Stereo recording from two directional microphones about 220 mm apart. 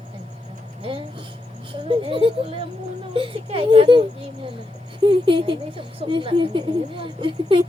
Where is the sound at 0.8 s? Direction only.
25° right (ahead or behind).